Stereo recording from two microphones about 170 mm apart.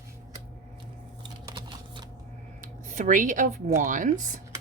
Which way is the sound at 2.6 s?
50° right (ahead or behind).